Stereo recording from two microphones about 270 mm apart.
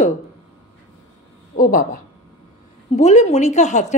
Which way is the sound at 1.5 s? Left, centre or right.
Left.